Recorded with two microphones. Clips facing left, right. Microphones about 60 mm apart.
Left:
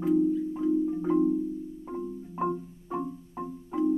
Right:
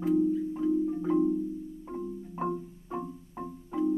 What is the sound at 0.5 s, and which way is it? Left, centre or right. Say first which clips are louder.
Marimba: left 1 dB; centre.